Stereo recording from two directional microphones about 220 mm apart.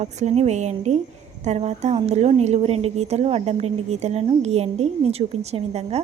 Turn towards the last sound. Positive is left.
turn(degrees=-30)  # may be behind; listen again after turning